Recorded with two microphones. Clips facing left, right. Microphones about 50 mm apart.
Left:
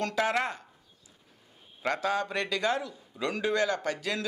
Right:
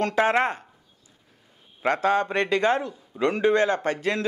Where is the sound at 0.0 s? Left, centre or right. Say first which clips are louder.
Right 7 dB; right.